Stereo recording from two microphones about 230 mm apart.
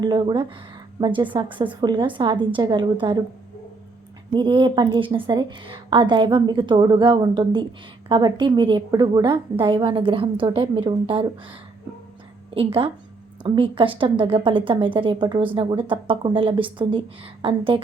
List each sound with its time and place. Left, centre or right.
0.0 s a woman's voice: centre
4.4 s a woman's voice: right
12.5 s a woman's voice: right